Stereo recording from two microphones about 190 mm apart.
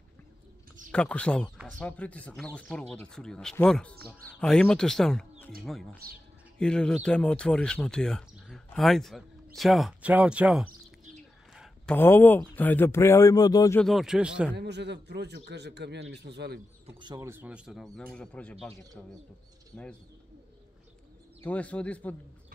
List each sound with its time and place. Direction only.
0.9 s speech: 5° left (ahead or behind)
13.7 s speech: centre (ahead or behind)
14.5 s speech: 65° right (ahead or behind)
17.0 s speech: 15° right (ahead or behind); by 19.9 s 5° left (ahead or behind)
21.4 s speech: 5° left (ahead or behind)